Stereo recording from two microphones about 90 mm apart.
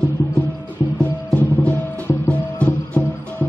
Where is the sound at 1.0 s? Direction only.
20° left (ahead or behind).